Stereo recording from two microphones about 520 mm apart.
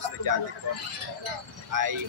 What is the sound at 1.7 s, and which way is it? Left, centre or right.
Speech, right.